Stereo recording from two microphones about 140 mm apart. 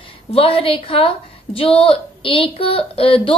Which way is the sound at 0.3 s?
40° left (ahead or behind).